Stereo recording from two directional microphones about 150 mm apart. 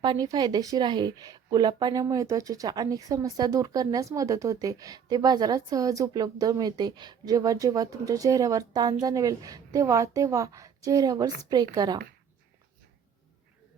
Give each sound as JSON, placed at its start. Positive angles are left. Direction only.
{"t": 0.0, "sound": "speech", "side_deg": -25}